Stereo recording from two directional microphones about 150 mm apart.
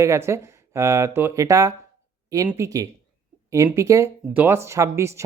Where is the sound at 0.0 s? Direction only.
20° right (ahead or behind).